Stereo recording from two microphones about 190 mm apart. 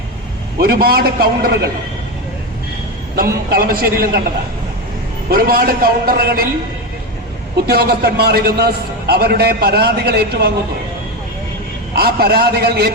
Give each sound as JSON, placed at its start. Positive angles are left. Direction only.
{"t": 0.6, "sound": "a man's voice", "side_deg": -55}
{"t": 3.5, "sound": "a man's voice", "side_deg": -55}
{"t": 5.3, "sound": "a man's voice", "side_deg": -50}
{"t": 7.7, "sound": "a man's voice", "side_deg": -55}
{"t": 11.9, "sound": "a man's voice", "side_deg": -55}